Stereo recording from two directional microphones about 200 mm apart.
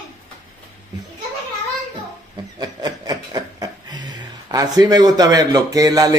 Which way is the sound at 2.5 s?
20° right (ahead or behind).